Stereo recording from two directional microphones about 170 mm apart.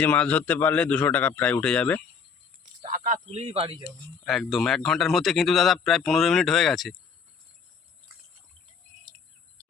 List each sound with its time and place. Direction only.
0.0 s a man's voice: 10° left (ahead or behind)
2.8 s speech: 50° right (ahead or behind); by 3.8 s 30° right (ahead or behind)
4.0 s a man's voice: 5° left (ahead or behind)
9.1 s bird: 5° left (ahead or behind)